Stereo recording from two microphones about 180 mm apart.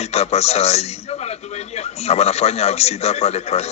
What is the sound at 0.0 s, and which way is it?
A man's voice, 35° left (ahead or behind).